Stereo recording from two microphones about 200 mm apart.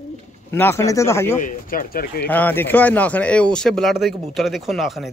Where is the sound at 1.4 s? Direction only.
45° left (ahead or behind).